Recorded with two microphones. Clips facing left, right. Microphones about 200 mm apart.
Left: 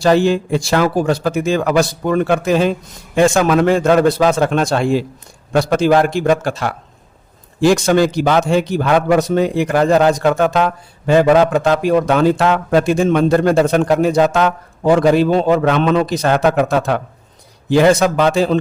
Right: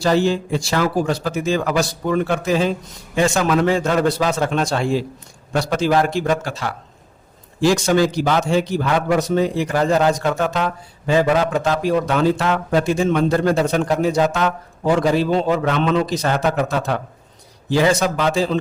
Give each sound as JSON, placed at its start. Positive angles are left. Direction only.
{"t": 0.0, "sound": "a man's voice", "side_deg": 60}